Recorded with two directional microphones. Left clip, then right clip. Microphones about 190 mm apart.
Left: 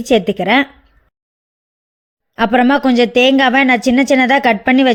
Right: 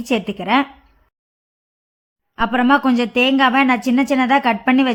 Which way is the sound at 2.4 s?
20° left (ahead or behind).